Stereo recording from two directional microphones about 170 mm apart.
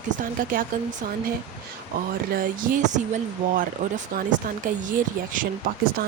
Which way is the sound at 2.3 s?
55° right (ahead or behind).